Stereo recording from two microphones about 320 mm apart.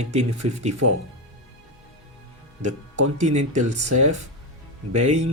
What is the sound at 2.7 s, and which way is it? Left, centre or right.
Speech, right.